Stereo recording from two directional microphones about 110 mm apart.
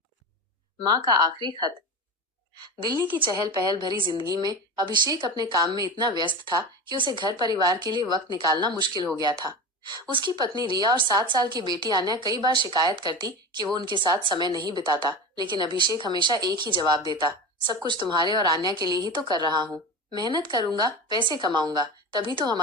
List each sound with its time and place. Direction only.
0.8 s a woman's voice: 40° right (ahead or behind)